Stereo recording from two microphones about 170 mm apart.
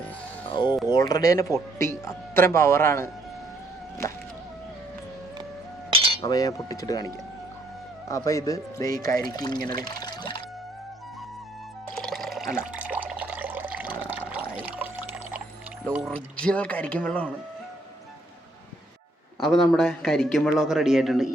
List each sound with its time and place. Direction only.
0.4 s music: 25° left (ahead or behind)
0.9 s speech: 25° left (ahead or behind)
5.9 s cutlery: 35° right (ahead or behind)
6.2 s speech: 20° left (ahead or behind)
9.8 s music: 25° left (ahead or behind)
11.9 s music: centre (ahead or behind)
12.7 s water: 10° right (ahead or behind)
14.6 s pour: 10° right (ahead or behind)
16.0 s speech: 5° left (ahead or behind)
19.4 s a man's voice: 5° left (ahead or behind)